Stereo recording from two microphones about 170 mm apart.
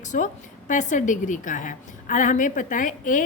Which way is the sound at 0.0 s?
45° left (ahead or behind).